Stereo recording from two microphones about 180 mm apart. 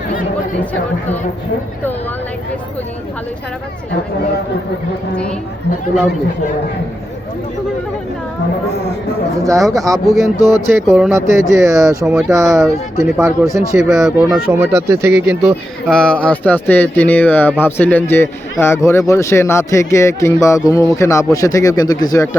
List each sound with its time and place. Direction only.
0.6 s a man's voice: 10° left (ahead or behind)
9.4 s speech: 20° right (ahead or behind)
10.1 s speech: centre (ahead or behind)
11.1 s speech: 15° right (ahead or behind)
13.4 s speech: centre (ahead or behind)
14.5 s speech: 15° right (ahead or behind)
15.9 s a man's voice: 5° left (ahead or behind)